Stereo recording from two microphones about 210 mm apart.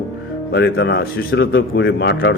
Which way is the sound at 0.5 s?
55° left (ahead or behind).